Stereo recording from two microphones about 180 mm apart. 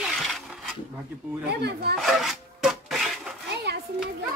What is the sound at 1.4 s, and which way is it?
Speech, 65° right (ahead or behind).